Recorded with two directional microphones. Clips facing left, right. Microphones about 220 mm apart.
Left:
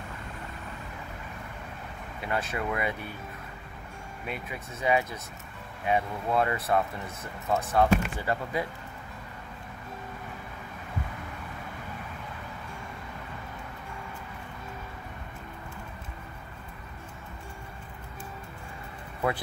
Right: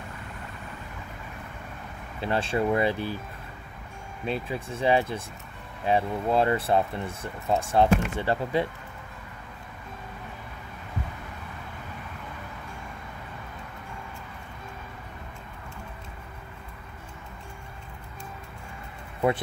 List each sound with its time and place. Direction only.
2.2 s speech: 30° right (ahead or behind)
4.3 s speech: 30° right (ahead or behind)